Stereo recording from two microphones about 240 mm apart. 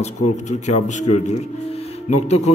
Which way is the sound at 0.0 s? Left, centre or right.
Left.